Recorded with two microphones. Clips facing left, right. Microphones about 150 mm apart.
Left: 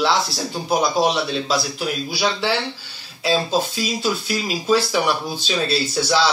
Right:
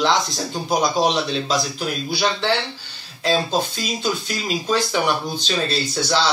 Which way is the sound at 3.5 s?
5° left (ahead or behind).